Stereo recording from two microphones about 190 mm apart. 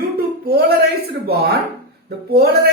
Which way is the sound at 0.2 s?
55° right (ahead or behind).